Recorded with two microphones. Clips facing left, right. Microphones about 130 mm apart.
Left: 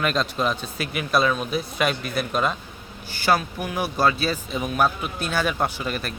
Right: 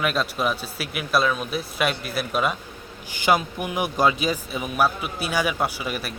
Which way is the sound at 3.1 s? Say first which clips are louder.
Right 1 dB; 15° right (ahead or behind).